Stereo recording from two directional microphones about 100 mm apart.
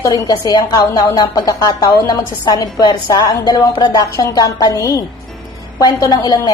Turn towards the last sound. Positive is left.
turn(degrees=40)  # may be behind; listen again after turning